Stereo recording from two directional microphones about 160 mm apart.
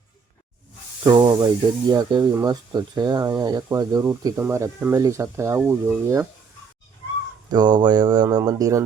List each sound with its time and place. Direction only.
1.0 s speech: 30° right (ahead or behind)
7.5 s speech: 25° right (ahead or behind)